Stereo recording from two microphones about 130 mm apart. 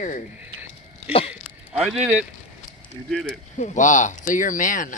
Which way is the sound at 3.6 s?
70° left (ahead or behind).